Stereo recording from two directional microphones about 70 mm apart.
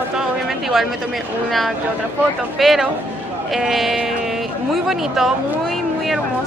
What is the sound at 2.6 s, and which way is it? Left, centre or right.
Speech, centre.